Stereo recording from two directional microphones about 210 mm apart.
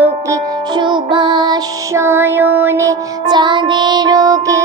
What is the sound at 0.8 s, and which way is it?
Music, 20° right (ahead or behind).